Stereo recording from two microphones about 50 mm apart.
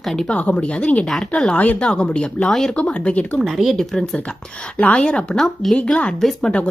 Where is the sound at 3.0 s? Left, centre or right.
Left.